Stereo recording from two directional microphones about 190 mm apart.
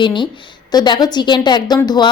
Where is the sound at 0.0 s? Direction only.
25° left (ahead or behind).